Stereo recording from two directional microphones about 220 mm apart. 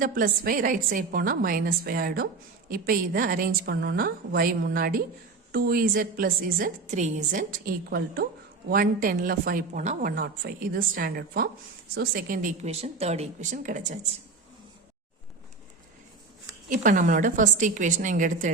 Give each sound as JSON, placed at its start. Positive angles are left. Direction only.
{"t": 0.0, "sound": "a woman's voice", "side_deg": -40}
{"t": 16.6, "sound": "a woman's voice", "side_deg": -35}